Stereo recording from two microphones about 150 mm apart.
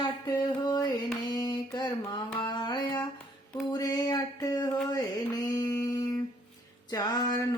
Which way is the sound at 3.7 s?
25° left (ahead or behind).